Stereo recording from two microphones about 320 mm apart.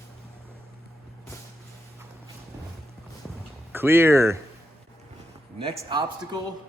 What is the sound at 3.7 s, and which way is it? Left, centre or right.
Speech, centre.